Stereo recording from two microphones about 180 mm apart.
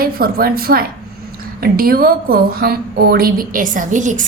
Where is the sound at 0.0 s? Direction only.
55° right (ahead or behind).